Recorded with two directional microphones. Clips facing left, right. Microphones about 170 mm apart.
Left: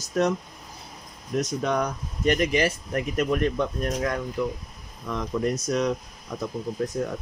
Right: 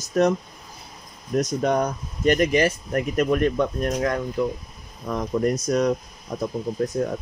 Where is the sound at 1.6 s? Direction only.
45° right (ahead or behind).